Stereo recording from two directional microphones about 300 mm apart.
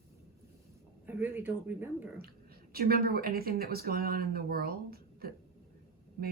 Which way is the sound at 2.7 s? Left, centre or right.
Right.